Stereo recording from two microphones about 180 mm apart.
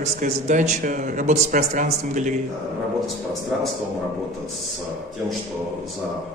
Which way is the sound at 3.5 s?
5° right (ahead or behind).